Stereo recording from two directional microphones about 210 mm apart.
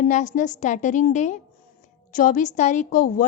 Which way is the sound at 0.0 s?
35° left (ahead or behind).